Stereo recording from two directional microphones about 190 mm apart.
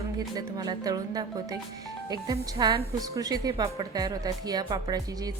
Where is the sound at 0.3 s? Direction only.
20° right (ahead or behind).